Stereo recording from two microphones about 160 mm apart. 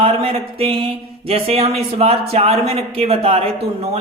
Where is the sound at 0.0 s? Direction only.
40° right (ahead or behind).